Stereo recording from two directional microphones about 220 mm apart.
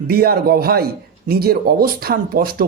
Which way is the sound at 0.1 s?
45° right (ahead or behind).